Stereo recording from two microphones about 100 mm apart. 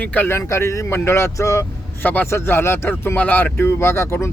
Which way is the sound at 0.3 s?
30° left (ahead or behind).